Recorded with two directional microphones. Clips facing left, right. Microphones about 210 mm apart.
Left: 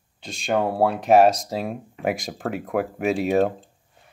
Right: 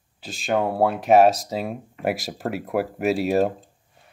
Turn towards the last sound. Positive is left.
turn(degrees=-5)  # may be behind; listen again after turning